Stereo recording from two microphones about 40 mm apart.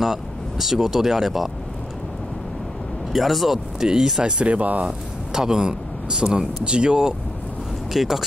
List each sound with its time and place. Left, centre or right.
0.0 s speech: centre
3.1 s speech: centre
4.4 s speech: right
5.3 s speech: centre
7.9 s speech: centre